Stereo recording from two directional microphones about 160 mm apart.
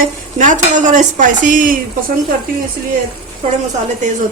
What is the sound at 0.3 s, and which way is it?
Stir, 50° right (ahead or behind).